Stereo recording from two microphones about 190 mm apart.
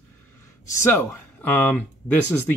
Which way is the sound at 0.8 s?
10° left (ahead or behind).